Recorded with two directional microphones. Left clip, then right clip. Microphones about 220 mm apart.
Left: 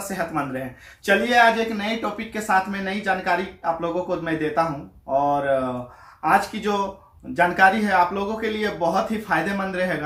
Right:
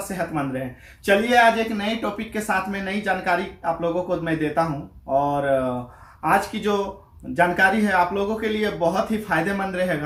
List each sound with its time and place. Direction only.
0.0 s speech: centre (ahead or behind)